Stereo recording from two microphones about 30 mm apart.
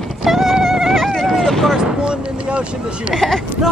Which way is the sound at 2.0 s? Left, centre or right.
Right.